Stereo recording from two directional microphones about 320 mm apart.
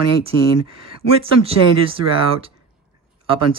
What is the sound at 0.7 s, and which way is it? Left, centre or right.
Speech, right.